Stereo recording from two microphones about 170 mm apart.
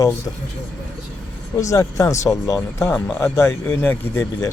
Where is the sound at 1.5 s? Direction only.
20° left (ahead or behind).